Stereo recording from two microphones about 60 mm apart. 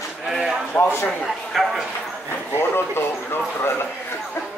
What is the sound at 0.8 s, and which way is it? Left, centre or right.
Speech, left.